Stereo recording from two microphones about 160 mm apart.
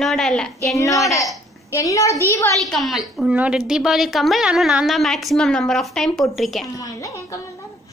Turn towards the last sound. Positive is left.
turn(degrees=20)  # may be behind; listen again after turning